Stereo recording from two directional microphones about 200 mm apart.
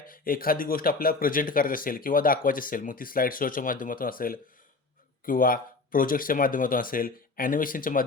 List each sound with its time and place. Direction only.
0.1 s speech: 45° left (ahead or behind)